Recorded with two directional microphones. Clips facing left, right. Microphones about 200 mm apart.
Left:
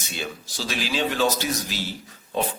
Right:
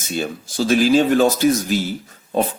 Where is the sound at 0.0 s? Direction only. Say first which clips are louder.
Right 9 dB; 45° right (ahead or behind).